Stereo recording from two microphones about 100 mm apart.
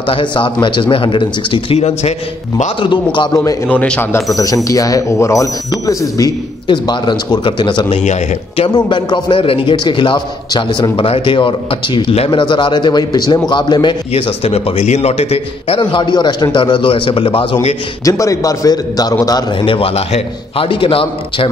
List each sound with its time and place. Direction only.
0.0 s speech: 55° left (ahead or behind); by 2.6 s 90° left
2.8 s a man's voice: 55° left (ahead or behind)
3.6 s a man's voice: 10° left (ahead or behind)
4.6 s speech: 35° left (ahead or behind)
6.7 s a man's voice: 50° left (ahead or behind)
11.1 s a man's voice: 65° left (ahead or behind); by 13.9 s 45° left (ahead or behind)
14.1 s a man's voice: 85° left
18.0 s speech: 35° left (ahead or behind)
19.6 s speech: 65° left (ahead or behind)